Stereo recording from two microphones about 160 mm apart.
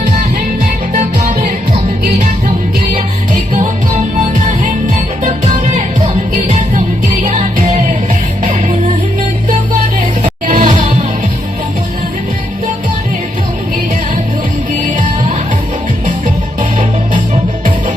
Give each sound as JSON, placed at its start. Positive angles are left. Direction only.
{"t": 3.5, "sound": "music", "side_deg": -50}
{"t": 5.7, "sound": "music", "side_deg": -45}
{"t": 10.4, "sound": "music", "side_deg": -50}